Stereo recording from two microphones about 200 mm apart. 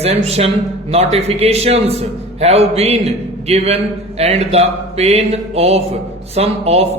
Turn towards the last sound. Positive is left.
turn(degrees=-30)  # may be behind; listen again after turning